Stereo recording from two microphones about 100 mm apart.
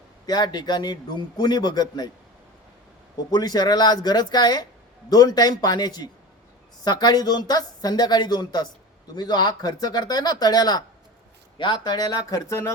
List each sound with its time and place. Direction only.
0.3 s a man's voice: 45° left (ahead or behind)
3.2 s a man's voice: 40° left (ahead or behind)